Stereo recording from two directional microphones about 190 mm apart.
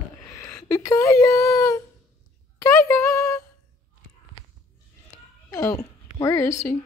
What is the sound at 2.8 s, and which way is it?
Speech, 15° left (ahead or behind).